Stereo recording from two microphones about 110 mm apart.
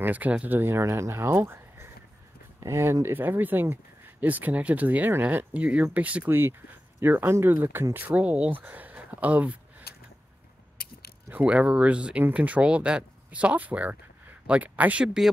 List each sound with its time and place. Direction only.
0.0 s speech: 15° right (ahead or behind)
11.2 s speech: 15° right (ahead or behind)